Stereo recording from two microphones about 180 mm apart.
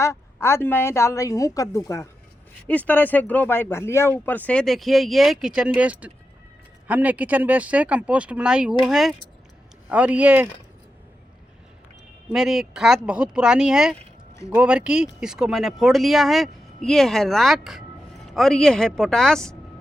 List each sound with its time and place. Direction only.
0.0 s a woman's voice: 15° left (ahead or behind); by 10.5 s 10° right (ahead or behind)
12.3 s speech: centre (ahead or behind)